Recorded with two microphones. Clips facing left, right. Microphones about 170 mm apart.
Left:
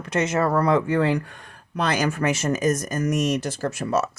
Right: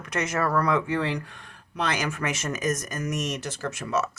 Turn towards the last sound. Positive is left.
turn(degrees=35)  # may be behind; listen again after turning